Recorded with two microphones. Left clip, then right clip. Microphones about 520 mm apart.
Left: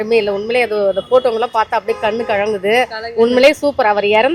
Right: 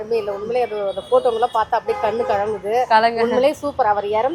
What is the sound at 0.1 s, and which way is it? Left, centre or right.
A woman's voice, left.